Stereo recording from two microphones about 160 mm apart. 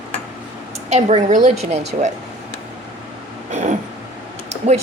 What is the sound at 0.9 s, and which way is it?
Speech, 45° right (ahead or behind).